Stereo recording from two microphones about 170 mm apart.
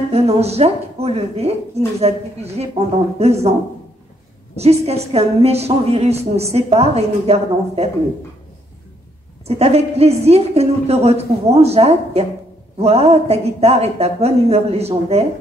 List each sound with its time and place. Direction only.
0.1 s a woman's voice: 40° right (ahead or behind)
4.6 s a woman's voice: 40° right (ahead or behind)
9.5 s a woman's voice: 35° right (ahead or behind)